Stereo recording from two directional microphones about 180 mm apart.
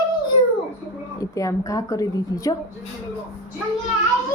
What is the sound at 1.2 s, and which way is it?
A woman's voice, 20° left (ahead or behind).